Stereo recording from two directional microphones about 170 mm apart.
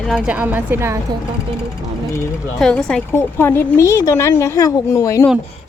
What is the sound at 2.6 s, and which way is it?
A woman's voice, 5° left (ahead or behind).